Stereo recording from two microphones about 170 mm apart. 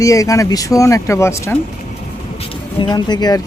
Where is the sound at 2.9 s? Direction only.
25° left (ahead or behind).